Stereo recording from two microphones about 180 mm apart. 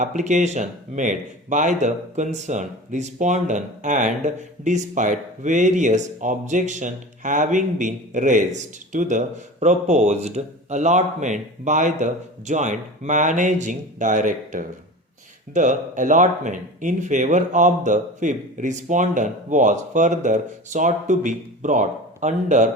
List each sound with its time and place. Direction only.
0.0 s speech: 40° right (ahead or behind)